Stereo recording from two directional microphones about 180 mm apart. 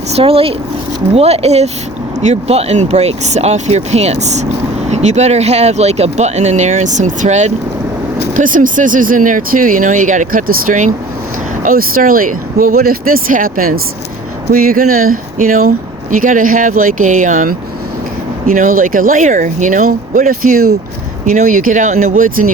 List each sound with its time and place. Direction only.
0.1 s speech: 30° right (ahead or behind); by 22.5 s 50° right (ahead or behind)